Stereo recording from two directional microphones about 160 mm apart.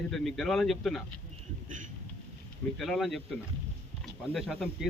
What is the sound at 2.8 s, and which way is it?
Speech, centre (ahead or behind).